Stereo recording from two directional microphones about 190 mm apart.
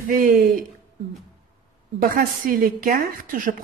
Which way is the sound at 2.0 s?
45° right (ahead or behind).